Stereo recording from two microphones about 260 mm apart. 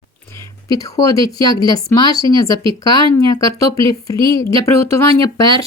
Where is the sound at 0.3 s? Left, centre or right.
Centre.